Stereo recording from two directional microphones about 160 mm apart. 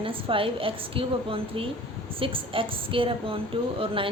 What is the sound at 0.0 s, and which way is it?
A woman's voice, 35° right (ahead or behind).